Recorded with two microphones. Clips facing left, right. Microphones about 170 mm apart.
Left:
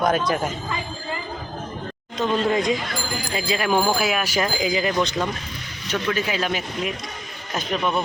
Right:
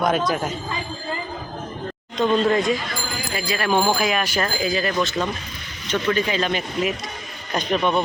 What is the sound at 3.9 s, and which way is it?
Speech, 5° left (ahead or behind).